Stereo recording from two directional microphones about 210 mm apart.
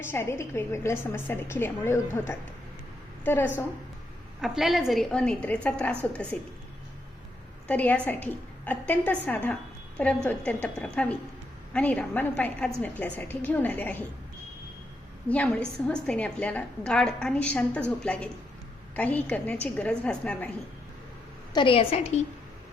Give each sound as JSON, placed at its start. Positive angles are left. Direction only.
{"t": 0.0, "sound": "a woman's voice", "side_deg": 10}
{"t": 4.4, "sound": "a woman's voice", "side_deg": 0}
{"t": 7.7, "sound": "a woman's voice", "side_deg": 5}
{"t": 15.3, "sound": "a woman's voice", "side_deg": 5}
{"t": 21.5, "sound": "a woman's voice", "side_deg": 25}